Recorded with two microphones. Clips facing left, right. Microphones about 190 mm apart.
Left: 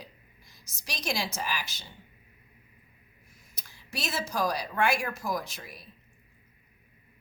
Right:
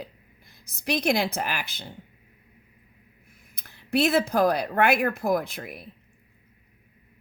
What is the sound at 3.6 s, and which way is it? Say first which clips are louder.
A woman's voice: right 15 dB; 60° right (ahead or behind).